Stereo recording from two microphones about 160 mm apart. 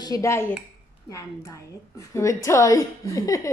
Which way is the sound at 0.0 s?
20° left (ahead or behind).